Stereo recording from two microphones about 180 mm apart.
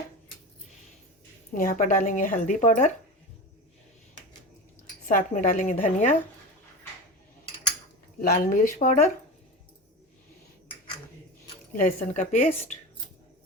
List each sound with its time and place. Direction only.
1.5 s speech: 45° left (ahead or behind)
5.0 s speech: 50° left (ahead or behind)
8.2 s speech: 50° left (ahead or behind)
11.7 s speech: 50° left (ahead or behind)